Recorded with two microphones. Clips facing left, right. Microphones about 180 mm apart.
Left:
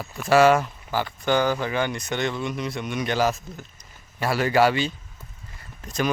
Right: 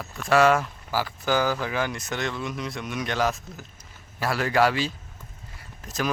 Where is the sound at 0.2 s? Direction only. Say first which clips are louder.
Left 3 dB; centre (ahead or behind).